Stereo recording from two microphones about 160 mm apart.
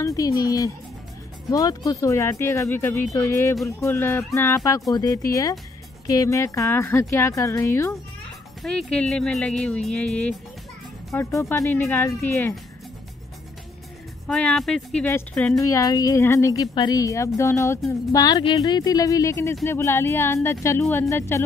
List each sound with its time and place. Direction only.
0.0 s speech: 20° left (ahead or behind)
8.6 s speech: 5° left (ahead or behind)
14.2 s speech: 5° left (ahead or behind)
15.6 s speech: 20° left (ahead or behind)